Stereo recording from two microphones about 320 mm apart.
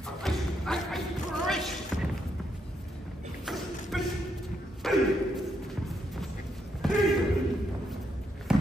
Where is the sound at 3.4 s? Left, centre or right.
Centre.